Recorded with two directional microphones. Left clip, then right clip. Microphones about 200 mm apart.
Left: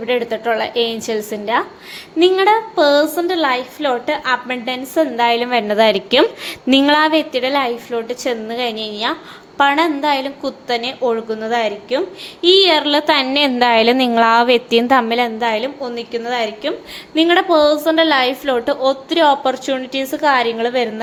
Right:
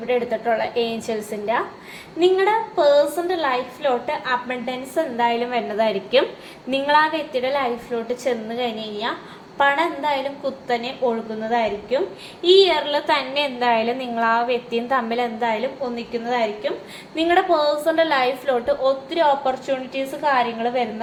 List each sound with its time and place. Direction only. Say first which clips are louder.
0.1 s a woman's voice: left 3 dB; 50° left (ahead or behind)